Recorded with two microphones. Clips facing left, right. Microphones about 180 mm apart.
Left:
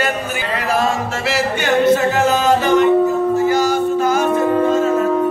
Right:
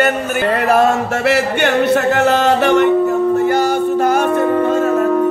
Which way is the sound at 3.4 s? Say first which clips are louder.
Right 1 dB; 60° right (ahead or behind).